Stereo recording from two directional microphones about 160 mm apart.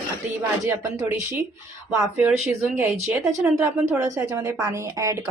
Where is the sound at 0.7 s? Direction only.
15° right (ahead or behind).